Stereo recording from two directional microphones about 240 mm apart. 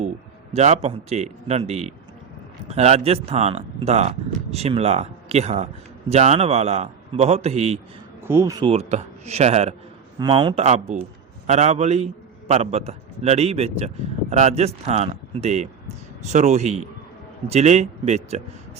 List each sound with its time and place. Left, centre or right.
0.5 s a man's voice: right
8.3 s a man's voice: centre; by 18.4 s right